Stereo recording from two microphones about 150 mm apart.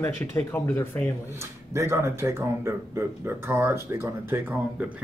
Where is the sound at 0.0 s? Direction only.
15° left (ahead or behind).